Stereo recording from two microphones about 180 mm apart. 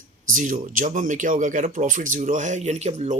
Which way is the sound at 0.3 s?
45° right (ahead or behind).